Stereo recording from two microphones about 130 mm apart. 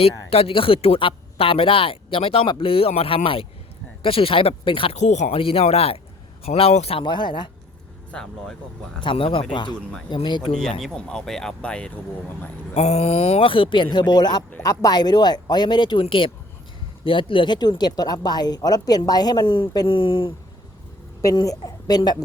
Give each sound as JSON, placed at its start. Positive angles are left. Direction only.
{"t": 0.3, "sound": "speech", "side_deg": 50}
{"t": 4.9, "sound": "speech", "side_deg": 65}
{"t": 5.4, "sound": "speech", "side_deg": 45}
{"t": 7.0, "sound": "speech", "side_deg": 35}
{"t": 8.1, "sound": "speech", "side_deg": 5}
{"t": 9.0, "sound": "speech", "side_deg": 40}
{"t": 10.2, "sound": "speech", "side_deg": 35}
{"t": 10.8, "sound": "speech", "side_deg": 5}
{"t": 12.7, "sound": "speech", "side_deg": 55}
{"t": 21.2, "sound": "a woman's voice", "side_deg": 25}